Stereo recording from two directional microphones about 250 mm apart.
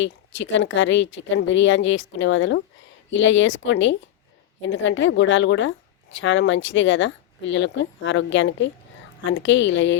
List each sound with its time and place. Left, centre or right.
0.0 s a woman's voice: left